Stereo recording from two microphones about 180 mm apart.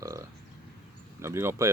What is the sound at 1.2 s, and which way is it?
Speech, 15° right (ahead or behind).